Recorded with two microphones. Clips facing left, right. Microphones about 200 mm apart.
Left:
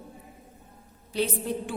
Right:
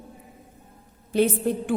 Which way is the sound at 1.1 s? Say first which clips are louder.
Right 7 dB; 50° right (ahead or behind).